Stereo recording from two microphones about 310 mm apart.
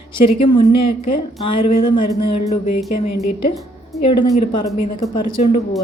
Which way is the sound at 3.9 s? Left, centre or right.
Centre.